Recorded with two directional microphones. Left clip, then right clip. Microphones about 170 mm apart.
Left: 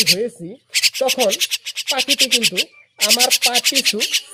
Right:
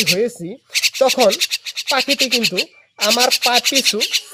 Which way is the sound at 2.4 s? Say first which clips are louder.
Even; 5° left (ahead or behind).